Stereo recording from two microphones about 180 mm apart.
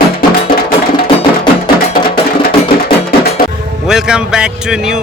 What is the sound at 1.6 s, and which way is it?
Music, 55° left (ahead or behind).